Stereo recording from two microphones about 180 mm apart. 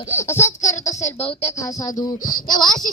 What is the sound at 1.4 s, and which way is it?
Music, 20° left (ahead or behind).